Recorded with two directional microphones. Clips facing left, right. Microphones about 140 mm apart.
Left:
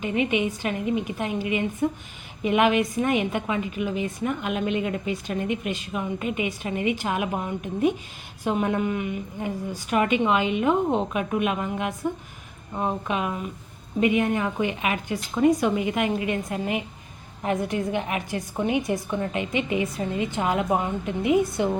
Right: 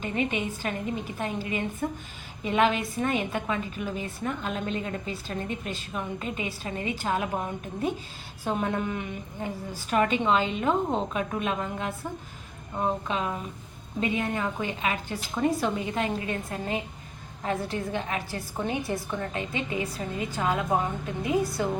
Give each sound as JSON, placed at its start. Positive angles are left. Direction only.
{"t": 0.3, "sound": "a woman's voice", "side_deg": 15}
{"t": 8.4, "sound": "a woman's voice", "side_deg": 10}